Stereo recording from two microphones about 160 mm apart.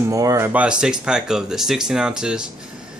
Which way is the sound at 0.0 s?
20° right (ahead or behind).